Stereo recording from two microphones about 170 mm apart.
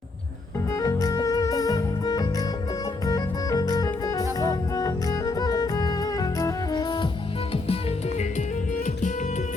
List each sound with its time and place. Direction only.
0.7 s music: 20° left (ahead or behind); by 8.4 s 40° left (ahead or behind)